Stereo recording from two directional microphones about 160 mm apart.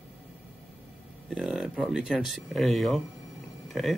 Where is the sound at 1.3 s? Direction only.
5° right (ahead or behind).